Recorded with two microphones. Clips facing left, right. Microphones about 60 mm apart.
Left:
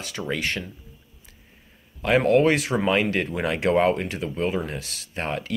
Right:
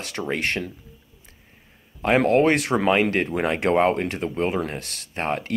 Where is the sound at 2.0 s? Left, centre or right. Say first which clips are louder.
Right 1 dB; right.